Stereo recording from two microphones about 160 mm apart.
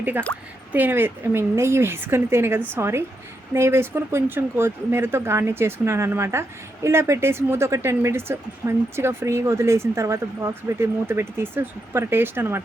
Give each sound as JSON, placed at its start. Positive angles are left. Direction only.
{"t": 0.0, "sound": "speech", "side_deg": -10}